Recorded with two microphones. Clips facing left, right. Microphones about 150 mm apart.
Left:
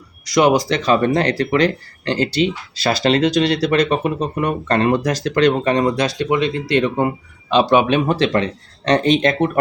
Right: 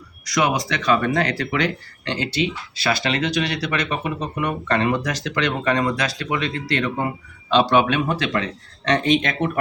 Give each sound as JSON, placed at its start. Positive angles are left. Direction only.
{"t": 0.3, "sound": "speech", "side_deg": 30}
{"t": 5.6, "sound": "speech", "side_deg": 25}
{"t": 7.9, "sound": "speech", "side_deg": 30}